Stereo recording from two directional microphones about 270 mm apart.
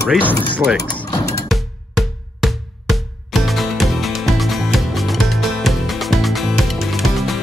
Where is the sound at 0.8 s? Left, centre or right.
Centre.